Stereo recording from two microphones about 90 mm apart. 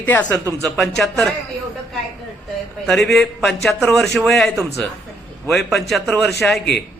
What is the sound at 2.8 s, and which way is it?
A man's voice, 5° left (ahead or behind).